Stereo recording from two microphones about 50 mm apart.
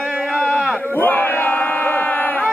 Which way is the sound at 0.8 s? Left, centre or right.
Left.